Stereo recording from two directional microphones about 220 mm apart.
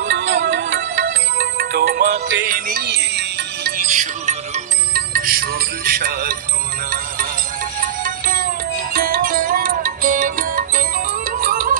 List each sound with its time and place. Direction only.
0.0 s music: 55° right (ahead or behind); by 6.3 s 40° right (ahead or behind)
8.0 s music: 40° right (ahead or behind)